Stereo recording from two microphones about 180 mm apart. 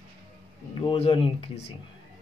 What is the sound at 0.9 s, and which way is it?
Speech, 30° left (ahead or behind).